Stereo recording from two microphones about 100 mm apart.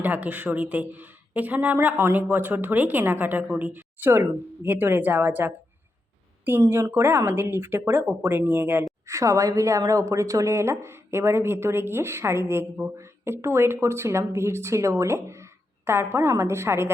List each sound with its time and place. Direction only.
0.0 s a woman's voice: 15° right (ahead or behind)
9.0 s a woman's voice: 30° right (ahead or behind)